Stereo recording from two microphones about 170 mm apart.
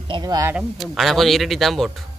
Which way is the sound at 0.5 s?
Centre (ahead or behind).